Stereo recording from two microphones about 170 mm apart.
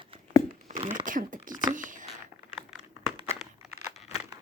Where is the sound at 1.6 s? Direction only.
50° right (ahead or behind).